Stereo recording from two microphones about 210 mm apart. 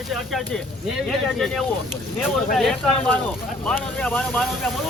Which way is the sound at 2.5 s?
5° left (ahead or behind).